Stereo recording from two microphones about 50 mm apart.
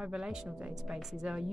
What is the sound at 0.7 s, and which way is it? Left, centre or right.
Speech, centre.